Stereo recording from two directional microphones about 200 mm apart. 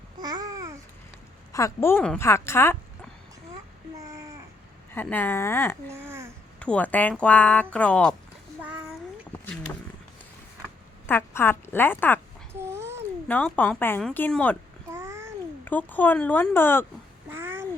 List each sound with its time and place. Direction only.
0.2 s babbling: 20° right (ahead or behind)
1.5 s a woman's voice: 15° left (ahead or behind)
4.9 s speech: 10° left (ahead or behind)
5.9 s a sound: 15° right (ahead or behind)
6.6 s speech: 5° left (ahead or behind)
8.6 s a sound: 5° right (ahead or behind)
11.0 s speech: 10° left (ahead or behind)
12.5 s babbling: 15° right (ahead or behind)
13.2 s speech: 10° left (ahead or behind)
14.9 s babbling: 15° right (ahead or behind)
15.6 s speech: 10° left (ahead or behind)
17.2 s babbling: 10° right (ahead or behind)